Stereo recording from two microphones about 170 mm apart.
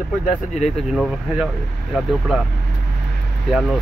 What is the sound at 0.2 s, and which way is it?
Speech, 45° left (ahead or behind).